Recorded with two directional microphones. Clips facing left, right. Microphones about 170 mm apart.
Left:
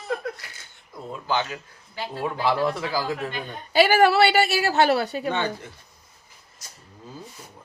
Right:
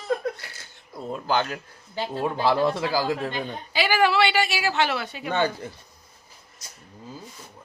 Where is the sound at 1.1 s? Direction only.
50° right (ahead or behind).